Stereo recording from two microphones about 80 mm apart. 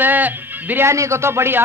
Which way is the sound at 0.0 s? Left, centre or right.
Right.